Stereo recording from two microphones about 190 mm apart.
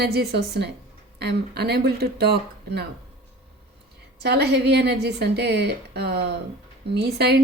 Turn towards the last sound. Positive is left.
turn(degrees=-60)  # may be behind; listen again after turning